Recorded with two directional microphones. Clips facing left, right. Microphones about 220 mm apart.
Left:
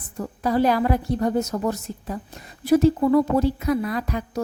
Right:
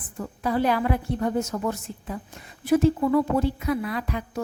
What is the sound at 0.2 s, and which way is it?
A woman's voice, 40° left (ahead or behind).